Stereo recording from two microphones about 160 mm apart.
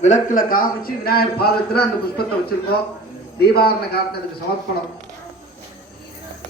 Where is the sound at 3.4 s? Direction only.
80° left.